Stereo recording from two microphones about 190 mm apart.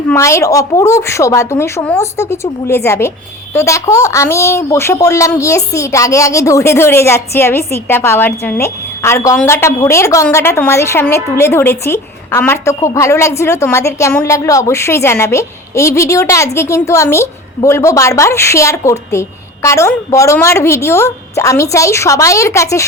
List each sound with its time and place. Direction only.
0.1 s a woman's voice: 15° left (ahead or behind)